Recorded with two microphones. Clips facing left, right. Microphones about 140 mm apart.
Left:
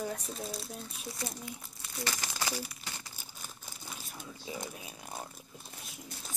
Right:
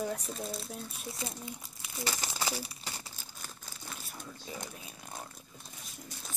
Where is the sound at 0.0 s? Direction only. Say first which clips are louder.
Right 2 dB; centre (ahead or behind).